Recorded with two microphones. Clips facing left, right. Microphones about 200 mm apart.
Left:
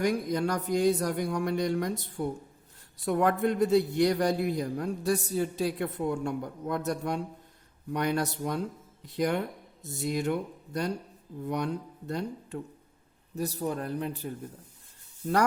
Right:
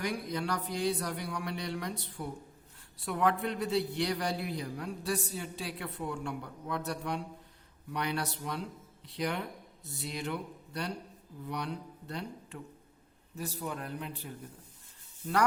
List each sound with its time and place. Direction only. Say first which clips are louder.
0.0 s a man's voice: left 7 dB; 45° left (ahead or behind)